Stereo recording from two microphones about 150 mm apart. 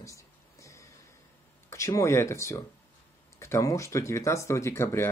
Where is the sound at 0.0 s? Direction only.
20° left (ahead or behind).